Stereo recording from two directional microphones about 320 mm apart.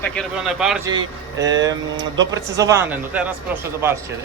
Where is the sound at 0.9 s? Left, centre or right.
Centre.